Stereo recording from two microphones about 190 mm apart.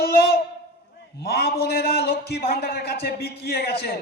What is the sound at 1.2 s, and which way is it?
A man's voice, 55° left (ahead or behind).